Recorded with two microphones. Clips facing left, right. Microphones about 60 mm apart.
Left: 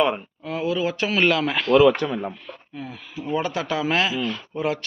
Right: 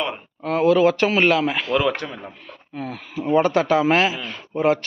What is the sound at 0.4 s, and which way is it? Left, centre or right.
Speech, right.